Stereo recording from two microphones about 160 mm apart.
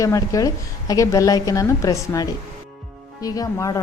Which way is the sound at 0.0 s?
20° left (ahead or behind).